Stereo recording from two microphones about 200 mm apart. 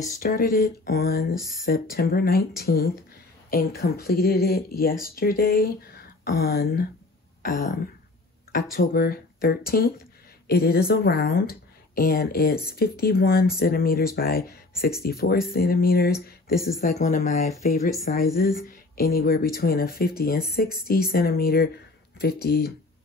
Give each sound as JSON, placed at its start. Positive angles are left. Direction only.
{"t": 0.2, "sound": "speech", "side_deg": 50}
{"t": 1.4, "sound": "speech", "side_deg": 0}
{"t": 1.7, "sound": "speech", "side_deg": 50}
{"t": 16.8, "sound": "speech", "side_deg": 35}
{"t": 18.1, "sound": "speech", "side_deg": 45}